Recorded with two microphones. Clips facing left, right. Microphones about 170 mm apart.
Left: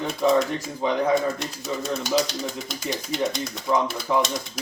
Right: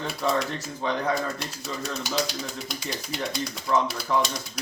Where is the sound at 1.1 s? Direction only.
Centre (ahead or behind).